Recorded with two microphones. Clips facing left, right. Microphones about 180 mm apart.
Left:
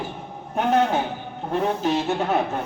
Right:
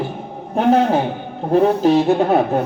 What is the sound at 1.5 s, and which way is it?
Speech, 35° right (ahead or behind).